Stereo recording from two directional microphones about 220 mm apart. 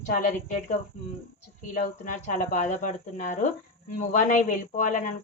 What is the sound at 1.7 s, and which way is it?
Speech, 35° left (ahead or behind).